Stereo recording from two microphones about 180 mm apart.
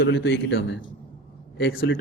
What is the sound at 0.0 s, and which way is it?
Speech, 70° left (ahead or behind).